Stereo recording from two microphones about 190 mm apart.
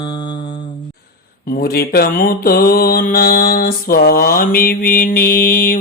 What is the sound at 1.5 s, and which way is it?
Speech, 55° left (ahead or behind).